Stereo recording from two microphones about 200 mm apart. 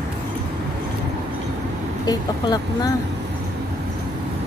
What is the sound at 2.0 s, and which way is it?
Speech, 20° left (ahead or behind).